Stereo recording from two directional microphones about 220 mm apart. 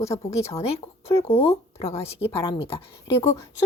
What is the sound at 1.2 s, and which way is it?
Speech, 25° left (ahead or behind).